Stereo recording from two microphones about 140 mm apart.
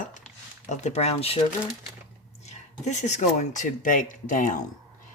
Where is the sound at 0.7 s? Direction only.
50° left (ahead or behind).